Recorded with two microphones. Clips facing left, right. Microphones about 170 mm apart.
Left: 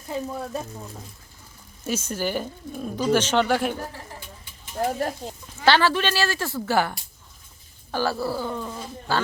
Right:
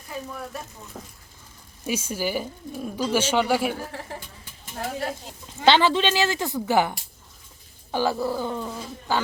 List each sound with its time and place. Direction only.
0.1 s speech: 25° left (ahead or behind)
1.8 s speech: 10° right (ahead or behind)
5.5 s speech: 20° right (ahead or behind)